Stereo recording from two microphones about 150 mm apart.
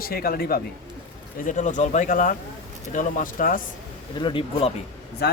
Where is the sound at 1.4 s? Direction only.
55° left (ahead or behind).